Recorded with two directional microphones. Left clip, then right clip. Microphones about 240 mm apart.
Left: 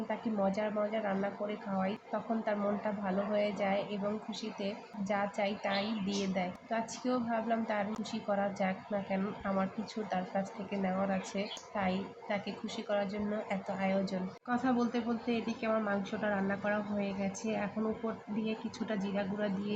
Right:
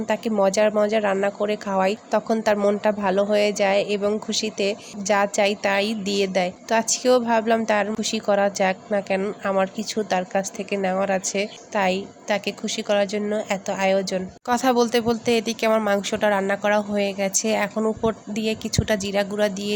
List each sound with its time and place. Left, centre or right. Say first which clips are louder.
0.1 s speech: right 14 dB; right